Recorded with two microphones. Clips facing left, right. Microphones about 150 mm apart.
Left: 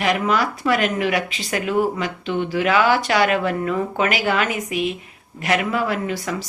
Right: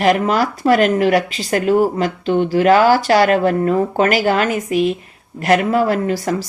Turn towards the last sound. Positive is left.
turn(degrees=-40)  # may be behind; listen again after turning